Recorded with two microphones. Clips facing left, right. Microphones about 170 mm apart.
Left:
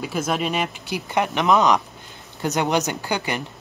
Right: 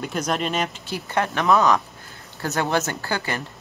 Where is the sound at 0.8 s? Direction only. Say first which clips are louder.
Left 1 dB; 15° left (ahead or behind).